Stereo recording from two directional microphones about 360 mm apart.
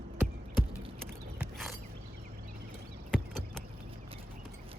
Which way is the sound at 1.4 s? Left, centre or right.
Centre.